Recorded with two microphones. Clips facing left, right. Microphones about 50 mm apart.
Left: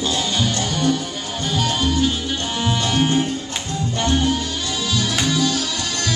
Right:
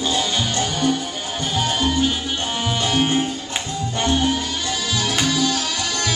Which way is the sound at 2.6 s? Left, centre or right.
Centre.